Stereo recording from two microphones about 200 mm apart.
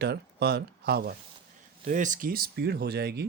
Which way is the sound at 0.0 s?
55° right (ahead or behind).